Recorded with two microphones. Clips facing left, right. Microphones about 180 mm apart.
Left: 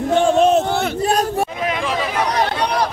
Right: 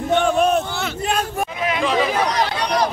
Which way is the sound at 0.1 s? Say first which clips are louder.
Left 3 dB; 25° left (ahead or behind).